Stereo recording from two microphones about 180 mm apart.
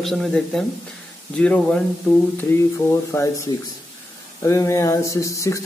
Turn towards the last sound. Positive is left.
turn(degrees=15)  # may be behind; listen again after turning